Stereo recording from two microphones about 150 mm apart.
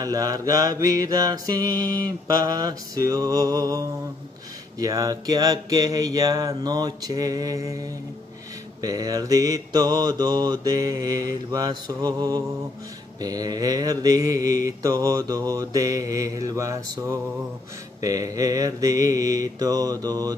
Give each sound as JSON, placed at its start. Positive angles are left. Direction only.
{"t": 0.0, "sound": "mantra", "side_deg": -25}
{"t": 8.8, "sound": "mantra", "side_deg": -25}